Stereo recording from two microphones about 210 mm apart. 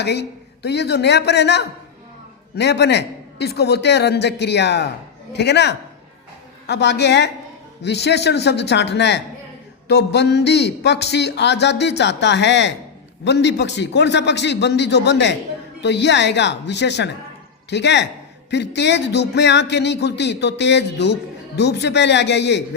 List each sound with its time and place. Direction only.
0.0 s a man's voice: 55° left (ahead or behind)